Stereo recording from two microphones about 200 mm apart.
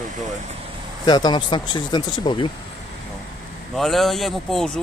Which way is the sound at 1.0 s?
20° left (ahead or behind).